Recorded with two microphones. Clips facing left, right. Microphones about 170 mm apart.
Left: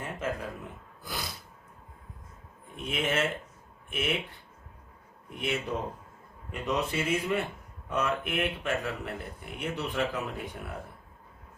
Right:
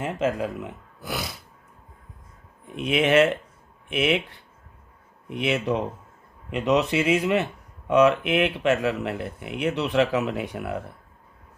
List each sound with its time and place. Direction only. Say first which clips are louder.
0.0 s speech: right 9 dB; 80° right
2.7 s speech: right 11 dB; 80° right